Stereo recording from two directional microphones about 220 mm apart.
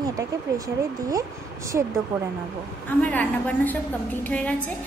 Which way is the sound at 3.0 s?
5° left (ahead or behind).